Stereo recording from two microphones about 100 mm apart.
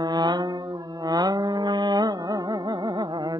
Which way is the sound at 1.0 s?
40° right (ahead or behind).